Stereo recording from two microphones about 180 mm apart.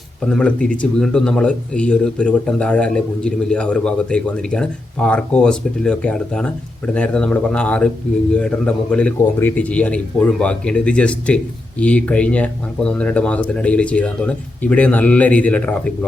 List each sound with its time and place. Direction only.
0.3 s speech: 5° left (ahead or behind)